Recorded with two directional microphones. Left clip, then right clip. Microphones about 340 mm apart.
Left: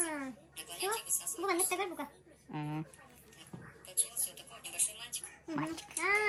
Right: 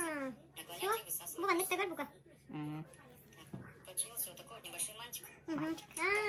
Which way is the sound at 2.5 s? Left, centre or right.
Centre.